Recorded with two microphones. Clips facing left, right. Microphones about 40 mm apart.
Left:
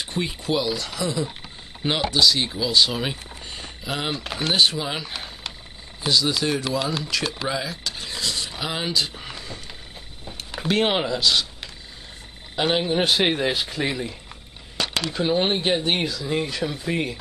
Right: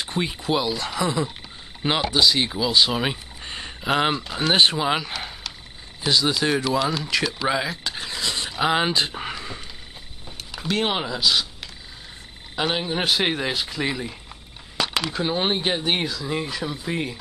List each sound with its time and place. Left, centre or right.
0.0 s speech: centre
6.8 s speech: centre
7.4 s speech: centre
8.3 s a sound: right
8.6 s speech: right
10.5 s speech: centre
11.1 s speech: centre
12.5 s speech: centre